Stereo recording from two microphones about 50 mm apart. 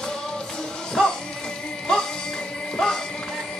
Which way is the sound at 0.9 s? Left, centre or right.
Centre.